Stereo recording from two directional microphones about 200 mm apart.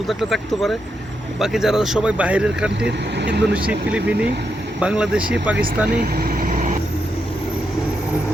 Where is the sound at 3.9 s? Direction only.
5° right (ahead or behind).